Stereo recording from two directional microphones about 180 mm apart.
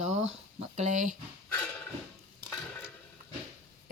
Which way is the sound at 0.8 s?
45° right (ahead or behind).